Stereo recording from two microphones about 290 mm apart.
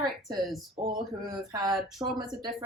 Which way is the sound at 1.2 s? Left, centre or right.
Centre.